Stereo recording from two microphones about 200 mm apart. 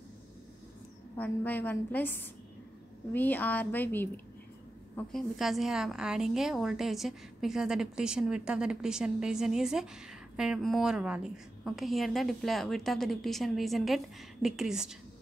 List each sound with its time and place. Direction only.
1.1 s a woman's voice: 10° left (ahead or behind)